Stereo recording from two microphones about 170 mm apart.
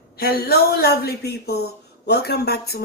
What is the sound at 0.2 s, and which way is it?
Speech, 65° left (ahead or behind).